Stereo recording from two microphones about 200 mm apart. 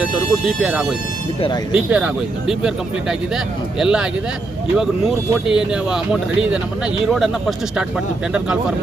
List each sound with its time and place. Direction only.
0.0 s speech: 5° right (ahead or behind)
1.4 s speech: 25° left (ahead or behind)
1.9 s speech: 5° right (ahead or behind)